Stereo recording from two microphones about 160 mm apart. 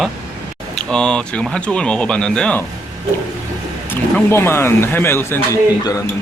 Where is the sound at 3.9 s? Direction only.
15° left (ahead or behind).